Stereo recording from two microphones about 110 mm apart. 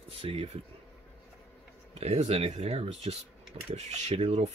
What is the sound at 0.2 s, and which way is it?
Speech, 60° right (ahead or behind).